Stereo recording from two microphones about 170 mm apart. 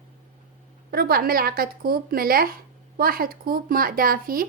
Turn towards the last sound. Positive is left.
turn(degrees=-55)  # may be behind; listen again after turning